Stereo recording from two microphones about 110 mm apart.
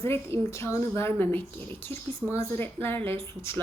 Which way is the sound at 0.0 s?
25° left (ahead or behind).